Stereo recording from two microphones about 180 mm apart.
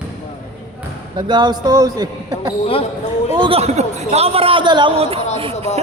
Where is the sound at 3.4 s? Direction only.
35° right (ahead or behind).